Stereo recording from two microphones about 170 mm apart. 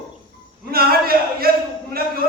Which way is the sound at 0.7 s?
60° right (ahead or behind).